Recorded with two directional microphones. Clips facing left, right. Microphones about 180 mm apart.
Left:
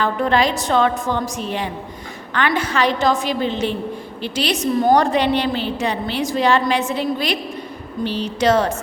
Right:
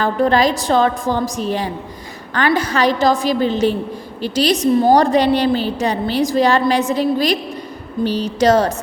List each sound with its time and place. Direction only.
0.0 s a woman's voice: 40° right (ahead or behind)